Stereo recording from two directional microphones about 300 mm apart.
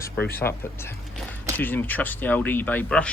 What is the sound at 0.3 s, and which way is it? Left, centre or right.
Speech, centre.